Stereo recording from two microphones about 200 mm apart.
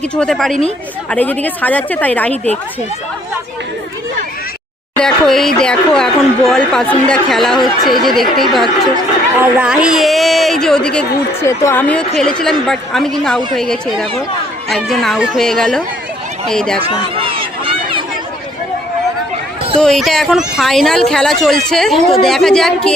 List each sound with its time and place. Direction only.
0.2 s a woman's voice: centre (ahead or behind)
4.9 s a woman's voice: centre (ahead or behind)
16.8 s a sound: 25° right (ahead or behind)
19.8 s a woman's voice: centre (ahead or behind)